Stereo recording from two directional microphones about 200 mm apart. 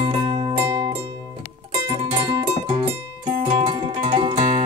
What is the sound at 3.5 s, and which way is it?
Music, 25° right (ahead or behind).